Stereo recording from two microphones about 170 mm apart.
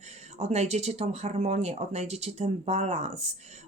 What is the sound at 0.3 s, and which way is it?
Speech, 40° right (ahead or behind).